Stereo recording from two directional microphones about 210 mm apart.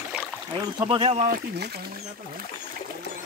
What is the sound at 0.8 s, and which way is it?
Speech, 25° right (ahead or behind).